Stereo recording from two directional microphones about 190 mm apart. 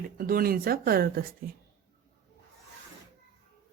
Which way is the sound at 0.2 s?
50° right (ahead or behind).